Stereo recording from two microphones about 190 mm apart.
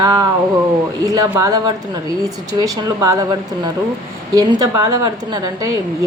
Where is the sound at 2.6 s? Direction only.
20° right (ahead or behind).